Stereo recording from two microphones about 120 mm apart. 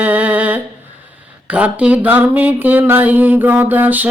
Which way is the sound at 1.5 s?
10° right (ahead or behind).